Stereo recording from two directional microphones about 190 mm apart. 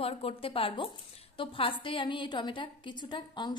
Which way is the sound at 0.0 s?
30° left (ahead or behind).